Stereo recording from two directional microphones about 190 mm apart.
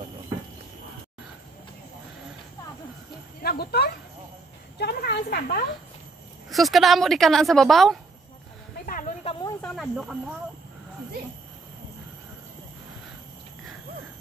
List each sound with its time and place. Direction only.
3.4 s speech: 55° left (ahead or behind)
4.7 s a sound: 55° left (ahead or behind)
6.5 s a woman's voice: centre (ahead or behind)
8.8 s a sound: 45° left (ahead or behind)
9.2 s snake: 30° left (ahead or behind)
9.8 s a woman's voice: centre (ahead or behind)